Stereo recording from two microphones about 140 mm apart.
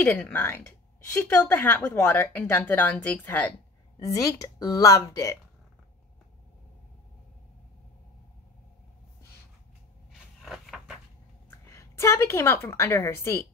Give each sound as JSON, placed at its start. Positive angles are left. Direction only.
{"t": 0.0, "sound": "speech", "side_deg": 15}
{"t": 4.0, "sound": "a woman's voice", "side_deg": 25}
{"t": 10.4, "sound": "a sound", "side_deg": 0}
{"t": 11.7, "sound": "a woman's voice", "side_deg": 20}